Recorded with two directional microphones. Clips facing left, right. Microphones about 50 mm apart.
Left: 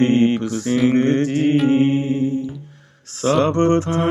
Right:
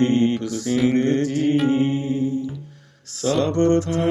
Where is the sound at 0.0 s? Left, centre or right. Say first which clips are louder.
Left 3 dB; left.